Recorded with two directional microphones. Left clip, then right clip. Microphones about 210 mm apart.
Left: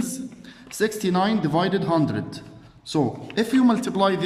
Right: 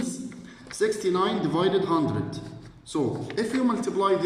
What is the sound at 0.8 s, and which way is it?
A man's voice, 50° left (ahead or behind).